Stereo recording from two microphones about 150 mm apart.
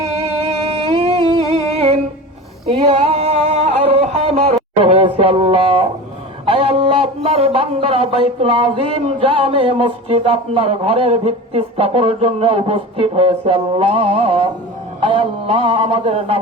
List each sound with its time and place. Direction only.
0.0 s music: 45° right (ahead or behind)
1.7 s music: 40° right (ahead or behind)
6.4 s a man's voice: 35° right (ahead or behind)